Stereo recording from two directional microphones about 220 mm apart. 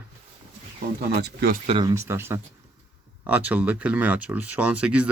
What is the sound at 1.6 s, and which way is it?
Speech, 25° right (ahead or behind).